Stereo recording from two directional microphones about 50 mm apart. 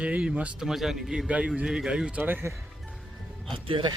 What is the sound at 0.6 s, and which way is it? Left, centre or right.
Speech, centre.